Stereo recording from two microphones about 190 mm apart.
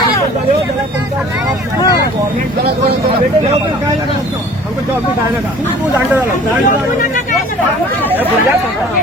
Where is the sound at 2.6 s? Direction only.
30° right (ahead or behind).